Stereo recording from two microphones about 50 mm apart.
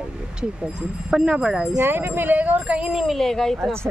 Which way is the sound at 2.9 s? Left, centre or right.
Centre.